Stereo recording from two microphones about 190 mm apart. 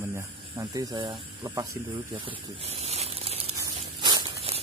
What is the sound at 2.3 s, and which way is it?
Crumpling, 35° right (ahead or behind).